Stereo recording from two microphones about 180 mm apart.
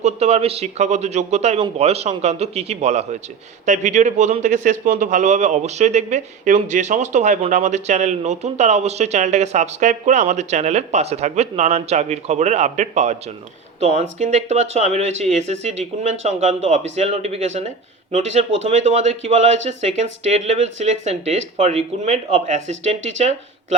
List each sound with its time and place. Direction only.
0.0 s a man's voice: 35° right (ahead or behind)